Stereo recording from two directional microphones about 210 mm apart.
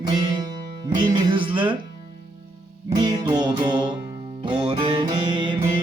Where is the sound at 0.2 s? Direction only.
20° right (ahead or behind).